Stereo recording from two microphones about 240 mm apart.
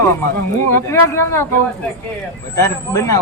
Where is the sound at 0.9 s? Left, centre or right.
Centre.